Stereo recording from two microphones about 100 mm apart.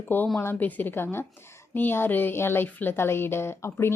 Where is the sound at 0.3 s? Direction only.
20° left (ahead or behind).